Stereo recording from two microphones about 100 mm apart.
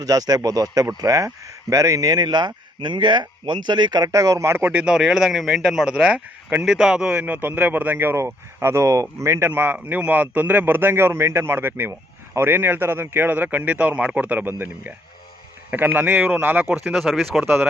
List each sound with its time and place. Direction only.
0.0 s speech: 40° right (ahead or behind); by 17.4 s centre (ahead or behind)
17.4 s speech: 15° right (ahead or behind)